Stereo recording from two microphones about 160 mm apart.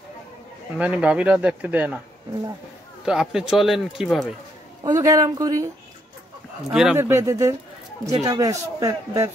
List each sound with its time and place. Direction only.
0.7 s speech: 10° right (ahead or behind)
3.1 s a man's voice: 5° right (ahead or behind)
4.8 s a man's voice: 20° right (ahead or behind)
6.7 s a man's voice: 5° right (ahead or behind)
7.0 s a man's voice: 15° right (ahead or behind)